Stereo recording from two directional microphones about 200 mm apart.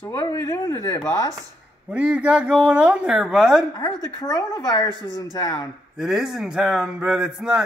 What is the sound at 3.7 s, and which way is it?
A woman's voice, 20° left (ahead or behind).